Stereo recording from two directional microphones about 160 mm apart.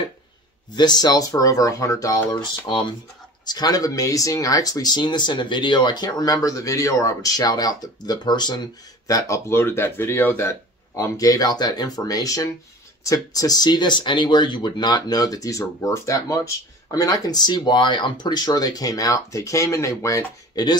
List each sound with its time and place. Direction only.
0.7 s speech: 25° left (ahead or behind)